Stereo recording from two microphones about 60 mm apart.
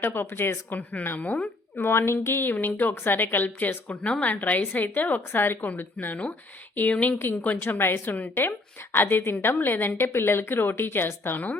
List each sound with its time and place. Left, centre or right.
0.0 s a woman's voice: left
1.2 s speech: left
7.2 s a woman's voice: left